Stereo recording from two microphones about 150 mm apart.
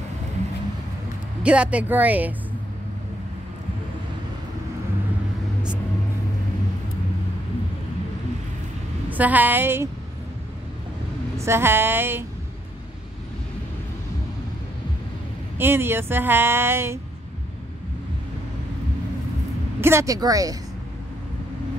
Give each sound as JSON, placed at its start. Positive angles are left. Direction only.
{"t": 1.4, "sound": "speech", "side_deg": -5}
{"t": 9.1, "sound": "speech", "side_deg": -10}
{"t": 11.3, "sound": "speech", "side_deg": -15}
{"t": 15.5, "sound": "speech", "side_deg": -15}
{"t": 19.8, "sound": "a woman's voice", "side_deg": -20}